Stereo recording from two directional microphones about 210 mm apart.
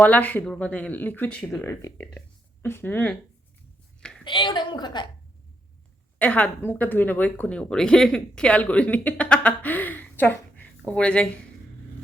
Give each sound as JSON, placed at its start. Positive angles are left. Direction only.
{"t": 0.0, "sound": "speech", "side_deg": 5}
{"t": 4.2, "sound": "a woman's voice", "side_deg": 20}
{"t": 6.1, "sound": "speech", "side_deg": 5}